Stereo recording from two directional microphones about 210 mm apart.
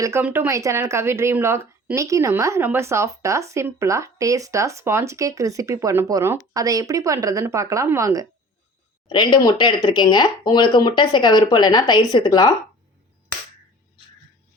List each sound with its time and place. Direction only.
0.0 s speech: 10° right (ahead or behind)
9.0 s speech: 20° left (ahead or behind)